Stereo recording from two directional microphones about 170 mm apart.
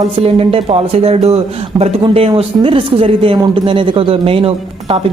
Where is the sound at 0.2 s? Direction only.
35° right (ahead or behind).